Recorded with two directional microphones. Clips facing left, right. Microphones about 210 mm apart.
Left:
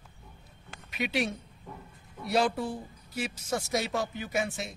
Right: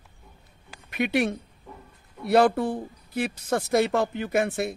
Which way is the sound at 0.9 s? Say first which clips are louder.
Right 6 dB; 55° right (ahead or behind).